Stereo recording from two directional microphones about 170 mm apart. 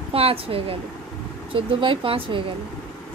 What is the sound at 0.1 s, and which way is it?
Speech, 35° right (ahead or behind).